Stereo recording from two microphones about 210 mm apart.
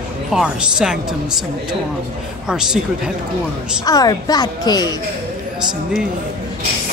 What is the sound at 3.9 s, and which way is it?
A woman's voice, 20° left (ahead or behind).